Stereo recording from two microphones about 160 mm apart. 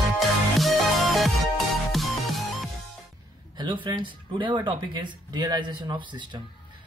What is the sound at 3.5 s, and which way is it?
Speech, 30° right (ahead or behind).